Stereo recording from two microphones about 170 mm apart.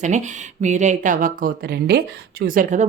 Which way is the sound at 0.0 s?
45° right (ahead or behind).